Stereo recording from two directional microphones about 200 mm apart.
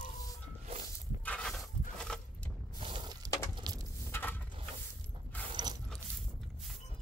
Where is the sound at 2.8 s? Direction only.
25° right (ahead or behind).